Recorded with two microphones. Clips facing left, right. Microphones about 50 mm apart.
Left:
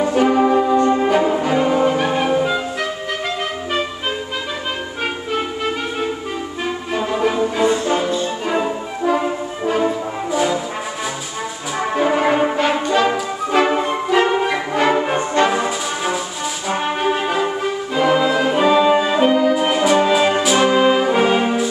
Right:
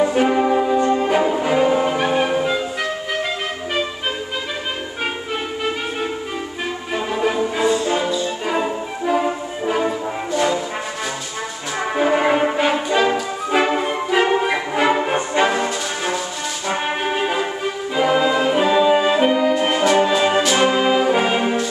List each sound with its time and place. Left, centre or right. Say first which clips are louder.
0.1 s brass instrument: left 2 dB; centre
0.4 s brass instrument: left 2 dB; centre
0.8 s music: left 2 dB; centre
1.4 s brass instrument: left 1 dB; centre
2.3 s music: left 2 dB; centre
6.9 s music: left 2 dB; centre
7.6 s music: left 1 dB; left
8.5 s music: left 1 dB; centre
11.8 s brass instrument: left 1 dB; centre
13.5 s music: left 2 dB; centre
15.5 s brass instrument: left 1 dB; centre
16.6 s brass instrument: left 3 dB; centre
17.9 s music: left 1 dB; centre
20.8 s brass instrument: left 2 dB; centre